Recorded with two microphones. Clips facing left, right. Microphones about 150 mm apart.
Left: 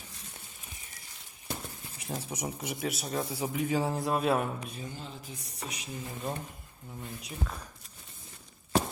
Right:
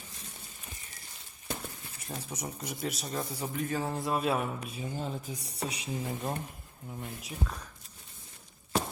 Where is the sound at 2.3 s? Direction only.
10° left (ahead or behind).